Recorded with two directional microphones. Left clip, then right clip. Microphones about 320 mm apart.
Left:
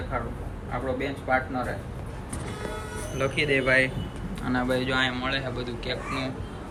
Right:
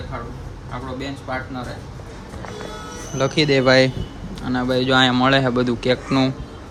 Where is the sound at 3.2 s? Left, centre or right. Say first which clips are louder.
Right 7 dB; centre.